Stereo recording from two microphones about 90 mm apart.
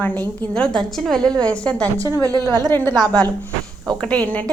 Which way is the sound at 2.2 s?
45° right (ahead or behind).